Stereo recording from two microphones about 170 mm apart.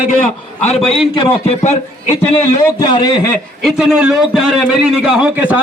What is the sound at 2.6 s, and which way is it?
Speech, 25° left (ahead or behind).